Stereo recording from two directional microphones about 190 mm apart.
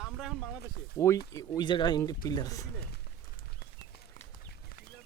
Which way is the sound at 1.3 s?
20° left (ahead or behind).